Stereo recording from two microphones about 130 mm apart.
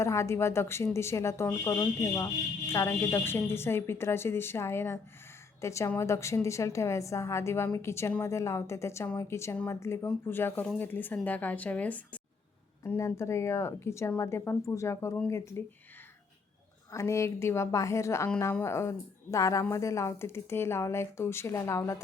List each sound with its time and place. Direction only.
0.0 s a woman's voice: 20° left (ahead or behind)
16.9 s speech: 20° left (ahead or behind)